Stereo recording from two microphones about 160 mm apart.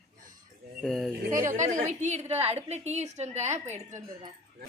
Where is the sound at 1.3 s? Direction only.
15° right (ahead or behind).